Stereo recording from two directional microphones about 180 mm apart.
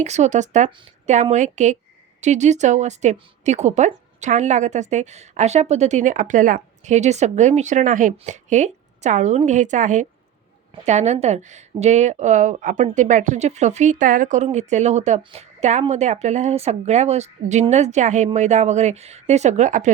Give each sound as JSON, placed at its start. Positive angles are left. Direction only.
{"t": 0.0, "sound": "a woman's voice", "side_deg": -40}